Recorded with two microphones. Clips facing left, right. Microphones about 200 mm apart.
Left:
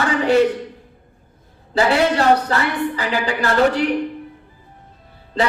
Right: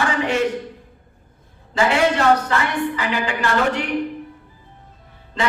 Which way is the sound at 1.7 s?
35° left (ahead or behind).